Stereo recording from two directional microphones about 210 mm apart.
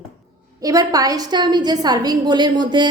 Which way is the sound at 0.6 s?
15° right (ahead or behind).